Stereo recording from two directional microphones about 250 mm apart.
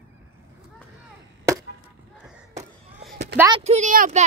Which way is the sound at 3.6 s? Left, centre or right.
Right.